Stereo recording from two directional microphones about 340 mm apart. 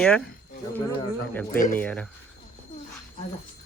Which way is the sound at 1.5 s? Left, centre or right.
Left.